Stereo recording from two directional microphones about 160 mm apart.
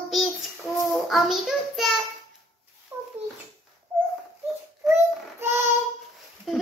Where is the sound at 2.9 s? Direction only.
20° right (ahead or behind).